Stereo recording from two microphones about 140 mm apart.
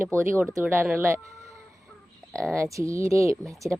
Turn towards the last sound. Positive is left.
turn(degrees=-20)  # may be behind; listen again after turning